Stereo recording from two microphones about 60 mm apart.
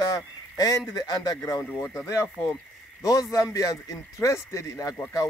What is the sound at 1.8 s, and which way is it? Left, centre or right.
Speech, left.